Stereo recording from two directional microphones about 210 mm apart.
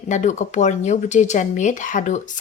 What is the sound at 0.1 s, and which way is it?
Speech, 35° left (ahead or behind).